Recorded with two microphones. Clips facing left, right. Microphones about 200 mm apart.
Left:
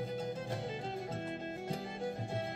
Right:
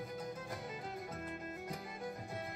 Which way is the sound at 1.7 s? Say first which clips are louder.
Left 8 dB; 30° left (ahead or behind).